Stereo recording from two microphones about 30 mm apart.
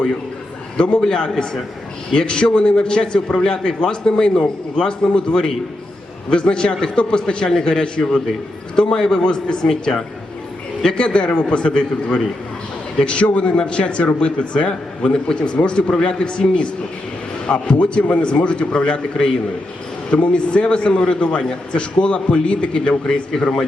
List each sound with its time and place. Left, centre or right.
0.8 s a man's voice: left
9.6 s a woman's voice: centre
10.8 s a man's voice: left
13.0 s a man's voice: left
14.7 s a man's voice: left
20.1 s a man's voice: left
23.3 s a man's voice: centre